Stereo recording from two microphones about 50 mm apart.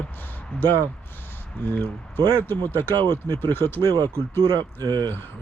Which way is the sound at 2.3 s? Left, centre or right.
Left.